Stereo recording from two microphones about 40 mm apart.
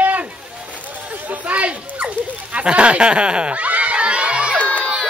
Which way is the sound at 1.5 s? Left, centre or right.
Right.